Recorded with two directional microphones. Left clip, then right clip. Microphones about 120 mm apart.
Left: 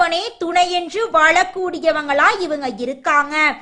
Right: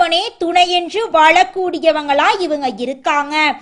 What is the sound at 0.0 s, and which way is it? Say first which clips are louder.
A woman's voice: right 3 dB; 20° right (ahead or behind).